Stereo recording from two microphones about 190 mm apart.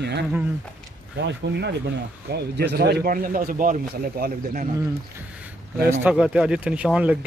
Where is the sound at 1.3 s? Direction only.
65° right (ahead or behind).